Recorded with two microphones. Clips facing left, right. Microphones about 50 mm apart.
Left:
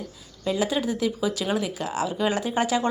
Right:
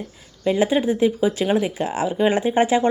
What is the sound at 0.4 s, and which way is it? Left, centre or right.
Speech, right.